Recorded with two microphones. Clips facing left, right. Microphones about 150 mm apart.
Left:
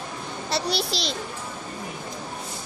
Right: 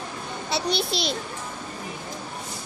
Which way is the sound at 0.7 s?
Centre (ahead or behind).